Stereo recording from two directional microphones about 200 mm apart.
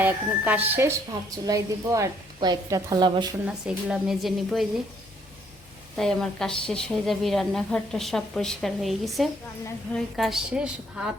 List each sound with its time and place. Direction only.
0.0 s a woman's voice: 10° right (ahead or behind)
3.4 s a woman's voice: 5° right (ahead or behind)
6.0 s a woman's voice: centre (ahead or behind)